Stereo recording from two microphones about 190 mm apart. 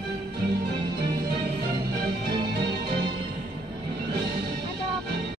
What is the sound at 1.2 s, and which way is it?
Music, 55° right (ahead or behind).